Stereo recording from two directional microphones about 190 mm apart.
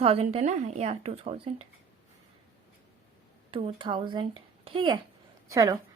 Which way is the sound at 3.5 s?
30° right (ahead or behind).